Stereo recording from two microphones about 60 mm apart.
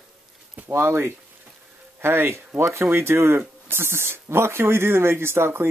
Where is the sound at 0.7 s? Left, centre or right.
Right.